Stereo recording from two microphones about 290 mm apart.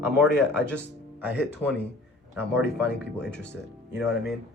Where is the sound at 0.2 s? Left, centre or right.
Centre.